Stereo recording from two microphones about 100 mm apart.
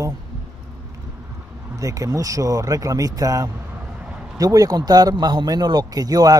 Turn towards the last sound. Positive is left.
turn(degrees=-40)  # may be behind; listen again after turning